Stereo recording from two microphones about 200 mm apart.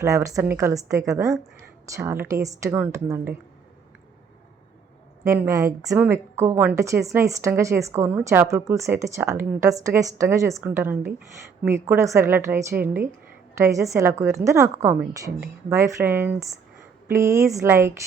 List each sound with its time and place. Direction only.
0.0 s a woman's voice: 15° right (ahead or behind)
5.2 s a woman's voice: 15° right (ahead or behind)